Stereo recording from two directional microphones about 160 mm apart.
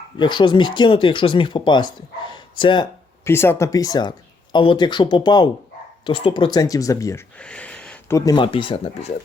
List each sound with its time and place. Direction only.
0.2 s speech: 30° left (ahead or behind)
3.2 s speech: 15° left (ahead or behind)
7.3 s a sound: 5° left (ahead or behind)
8.0 s speech: 20° left (ahead or behind); by 9.1 s 40° left (ahead or behind)